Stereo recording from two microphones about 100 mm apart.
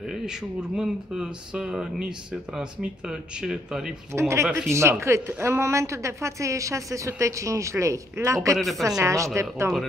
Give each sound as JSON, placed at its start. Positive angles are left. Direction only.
{"t": 0.1, "sound": "speech", "side_deg": -5}
{"t": 4.1, "sound": "a woman's voice", "side_deg": -25}
{"t": 8.5, "sound": "speech", "side_deg": 0}
{"t": 9.0, "sound": "speech", "side_deg": -30}